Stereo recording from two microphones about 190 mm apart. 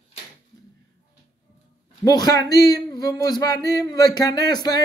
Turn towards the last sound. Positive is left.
turn(degrees=20)  # may be behind; listen again after turning